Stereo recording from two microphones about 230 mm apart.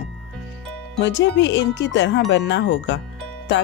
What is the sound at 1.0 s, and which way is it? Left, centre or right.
Speech, left.